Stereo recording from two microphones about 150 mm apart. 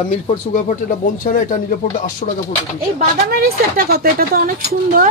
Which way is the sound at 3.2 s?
85° right.